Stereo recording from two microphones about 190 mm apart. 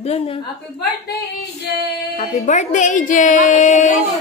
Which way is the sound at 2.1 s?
40° left (ahead or behind).